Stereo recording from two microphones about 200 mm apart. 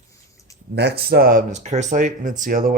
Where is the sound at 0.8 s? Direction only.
55° right (ahead or behind).